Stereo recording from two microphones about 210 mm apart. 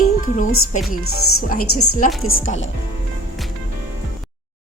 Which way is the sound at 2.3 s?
65° left (ahead or behind).